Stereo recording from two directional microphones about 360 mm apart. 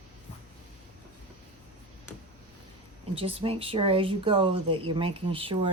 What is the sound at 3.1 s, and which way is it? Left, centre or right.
Speech, centre.